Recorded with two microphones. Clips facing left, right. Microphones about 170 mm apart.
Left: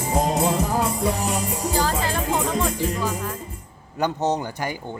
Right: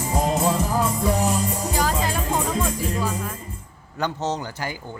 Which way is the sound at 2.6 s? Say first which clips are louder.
Left 1 dB; centre (ahead or behind).